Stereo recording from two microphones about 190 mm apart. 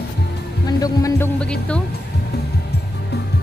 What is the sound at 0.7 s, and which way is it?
Speech, 20° left (ahead or behind).